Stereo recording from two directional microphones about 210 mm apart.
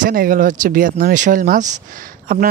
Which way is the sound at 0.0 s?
45° right (ahead or behind).